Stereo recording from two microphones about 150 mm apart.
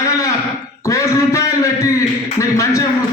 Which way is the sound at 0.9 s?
20° left (ahead or behind).